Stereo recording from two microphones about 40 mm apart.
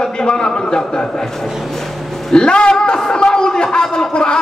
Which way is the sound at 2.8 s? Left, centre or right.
Left.